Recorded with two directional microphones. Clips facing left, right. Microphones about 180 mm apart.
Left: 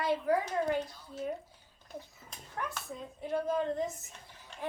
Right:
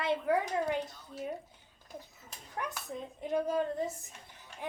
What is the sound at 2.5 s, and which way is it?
A child's voice, 15° right (ahead or behind).